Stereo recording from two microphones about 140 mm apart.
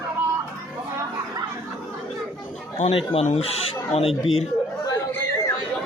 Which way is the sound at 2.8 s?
45° left (ahead or behind).